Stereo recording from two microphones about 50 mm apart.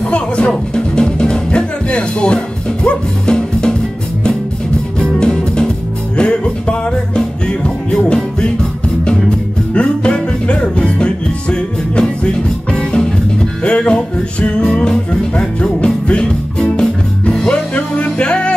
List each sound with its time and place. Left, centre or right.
0.7 s music: centre
5.0 s music: centre
9.8 s music: left